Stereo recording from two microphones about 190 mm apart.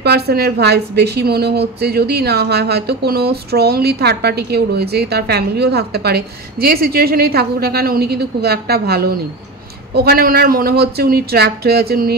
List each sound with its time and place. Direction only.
0.0 s a woman's voice: 55° right (ahead or behind)